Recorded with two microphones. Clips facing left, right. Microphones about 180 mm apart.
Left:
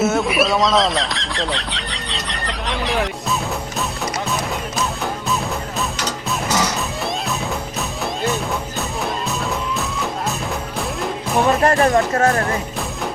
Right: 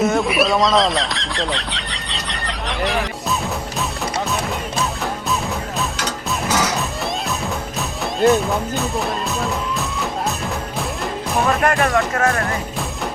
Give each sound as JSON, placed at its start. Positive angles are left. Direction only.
{"t": 0.0, "sound": "a sound", "side_deg": 0}
{"t": 3.8, "sound": "music", "side_deg": 0}
{"t": 6.5, "sound": "music", "side_deg": 0}
{"t": 11.6, "sound": "speech", "side_deg": 35}